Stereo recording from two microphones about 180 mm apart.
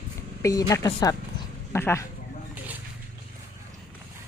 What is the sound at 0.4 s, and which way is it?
A woman's voice, 15° left (ahead or behind).